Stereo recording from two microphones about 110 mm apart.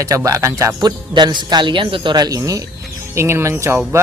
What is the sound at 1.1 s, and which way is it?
Speech, 40° right (ahead or behind).